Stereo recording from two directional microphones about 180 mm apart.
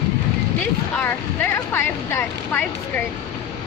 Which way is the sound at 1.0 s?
10° left (ahead or behind).